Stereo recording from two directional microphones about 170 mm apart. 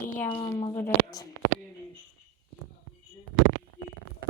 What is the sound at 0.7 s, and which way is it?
Speech, 20° left (ahead or behind).